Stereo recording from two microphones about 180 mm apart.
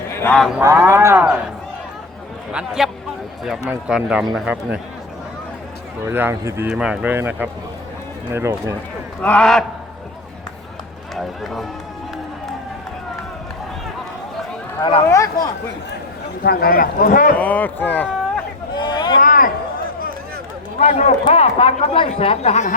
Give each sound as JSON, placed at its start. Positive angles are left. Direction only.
{"t": 0.2, "sound": "speech", "side_deg": 10}
{"t": 0.6, "sound": "speech", "side_deg": -15}
{"t": 2.5, "sound": "speech", "side_deg": -5}
{"t": 6.1, "sound": "speech", "side_deg": -15}
{"t": 9.2, "sound": "speech", "side_deg": 5}
{"t": 11.1, "sound": "speech", "side_deg": 0}
{"t": 14.8, "sound": "speech", "side_deg": 30}
{"t": 16.4, "sound": "speech", "side_deg": 60}
{"t": 17.3, "sound": "speech", "side_deg": 10}
{"t": 18.8, "sound": "boat", "side_deg": 25}
{"t": 19.2, "sound": "a sound", "side_deg": 50}
{"t": 20.7, "sound": "speech", "side_deg": 40}